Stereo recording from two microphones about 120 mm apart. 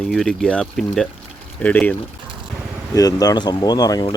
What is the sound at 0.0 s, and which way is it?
Speech, centre (ahead or behind).